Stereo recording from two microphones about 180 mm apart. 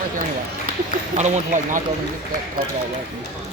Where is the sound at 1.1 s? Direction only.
40° right (ahead or behind).